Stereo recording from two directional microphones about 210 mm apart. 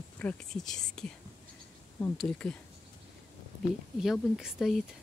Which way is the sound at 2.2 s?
5° left (ahead or behind).